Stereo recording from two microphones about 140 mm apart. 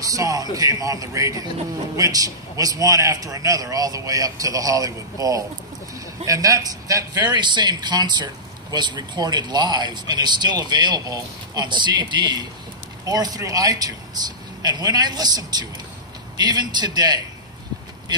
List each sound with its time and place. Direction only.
0.1 s a man's voice: 25° right (ahead or behind)